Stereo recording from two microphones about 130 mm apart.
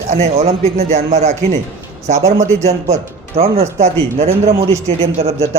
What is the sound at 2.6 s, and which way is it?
A man's voice, 55° right (ahead or behind).